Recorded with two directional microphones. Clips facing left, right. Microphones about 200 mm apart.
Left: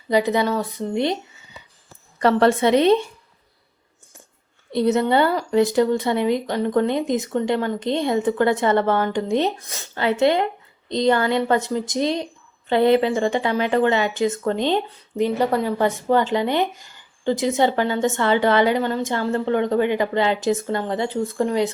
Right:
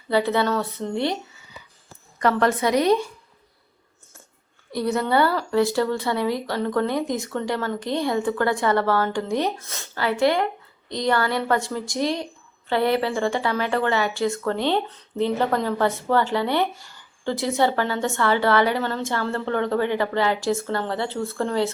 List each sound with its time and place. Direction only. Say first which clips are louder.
0.1 s speech: left 2 dB; 15° left (ahead or behind)
4.7 s speech: left 4 dB; 20° left (ahead or behind)